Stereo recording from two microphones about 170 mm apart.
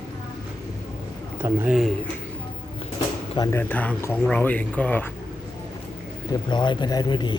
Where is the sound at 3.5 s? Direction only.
10° left (ahead or behind).